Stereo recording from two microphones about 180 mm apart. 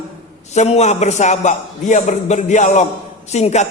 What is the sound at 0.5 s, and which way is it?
A man's voice, 40° left (ahead or behind).